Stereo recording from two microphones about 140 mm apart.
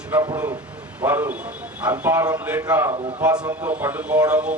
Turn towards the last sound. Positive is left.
turn(degrees=-10)  # may be behind; listen again after turning